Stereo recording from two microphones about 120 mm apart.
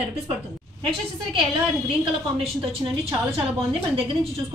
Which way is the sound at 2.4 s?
50° right (ahead or behind).